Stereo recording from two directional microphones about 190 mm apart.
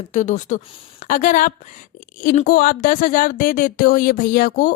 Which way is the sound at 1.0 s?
45° left (ahead or behind).